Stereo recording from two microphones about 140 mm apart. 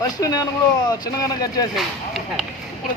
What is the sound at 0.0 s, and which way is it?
Speech, 25° left (ahead or behind).